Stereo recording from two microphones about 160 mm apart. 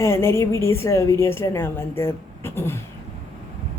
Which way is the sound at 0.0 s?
15° left (ahead or behind).